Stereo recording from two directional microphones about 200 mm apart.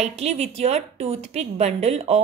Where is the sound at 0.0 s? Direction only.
30° right (ahead or behind).